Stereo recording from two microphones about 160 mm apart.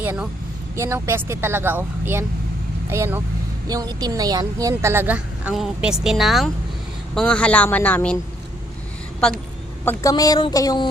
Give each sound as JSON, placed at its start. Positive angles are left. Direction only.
{"t": 0.0, "sound": "a woman's voice", "side_deg": -10}
{"t": 9.8, "sound": "speech", "side_deg": 15}